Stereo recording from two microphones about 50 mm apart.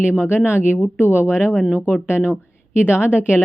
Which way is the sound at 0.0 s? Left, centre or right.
Right.